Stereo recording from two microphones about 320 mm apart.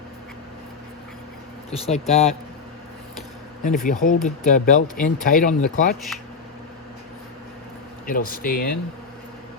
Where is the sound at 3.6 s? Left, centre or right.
Left.